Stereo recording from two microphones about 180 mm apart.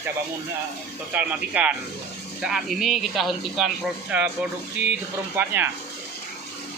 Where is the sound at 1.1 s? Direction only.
10° right (ahead or behind).